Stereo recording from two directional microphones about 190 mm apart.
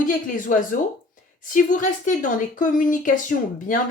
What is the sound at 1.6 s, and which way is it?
Speech, 45° left (ahead or behind).